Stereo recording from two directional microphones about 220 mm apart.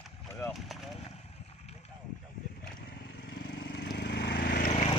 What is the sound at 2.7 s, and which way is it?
Vehicle, 45° left (ahead or behind).